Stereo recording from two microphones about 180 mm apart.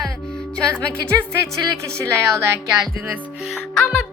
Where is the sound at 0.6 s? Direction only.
5° left (ahead or behind).